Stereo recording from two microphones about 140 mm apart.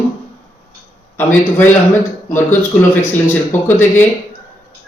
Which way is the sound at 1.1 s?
15° left (ahead or behind).